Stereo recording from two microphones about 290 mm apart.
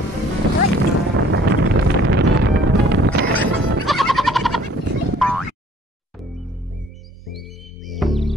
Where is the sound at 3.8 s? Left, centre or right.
Centre.